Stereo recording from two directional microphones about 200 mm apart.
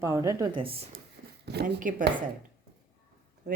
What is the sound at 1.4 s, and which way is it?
Speech, 55° right (ahead or behind).